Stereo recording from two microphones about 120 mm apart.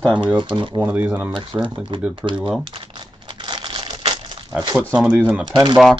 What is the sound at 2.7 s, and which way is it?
Crumpling, 45° right (ahead or behind).